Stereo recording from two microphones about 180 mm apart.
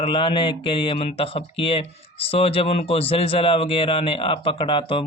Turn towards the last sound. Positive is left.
turn(degrees=30)  # may be behind; listen again after turning